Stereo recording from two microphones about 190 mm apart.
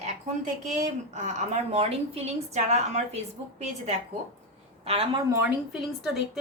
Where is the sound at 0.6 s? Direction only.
40° right (ahead or behind).